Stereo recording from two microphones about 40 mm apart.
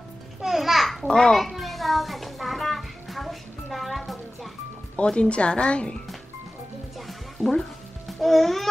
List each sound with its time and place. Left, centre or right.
0.4 s a sound: centre
1.0 s a child's voice: centre
1.4 s music: centre
4.9 s speech: left
8.1 s music: centre